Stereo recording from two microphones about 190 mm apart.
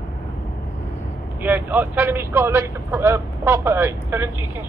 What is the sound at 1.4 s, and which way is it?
Speech, 10° right (ahead or behind).